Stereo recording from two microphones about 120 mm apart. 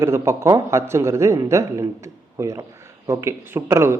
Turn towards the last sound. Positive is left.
turn(degrees=-20)  # may be behind; listen again after turning